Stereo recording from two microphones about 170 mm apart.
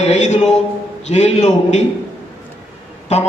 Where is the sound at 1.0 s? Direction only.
40° left (ahead or behind).